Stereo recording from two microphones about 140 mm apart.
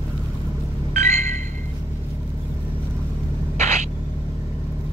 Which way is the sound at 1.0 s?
60° right (ahead or behind).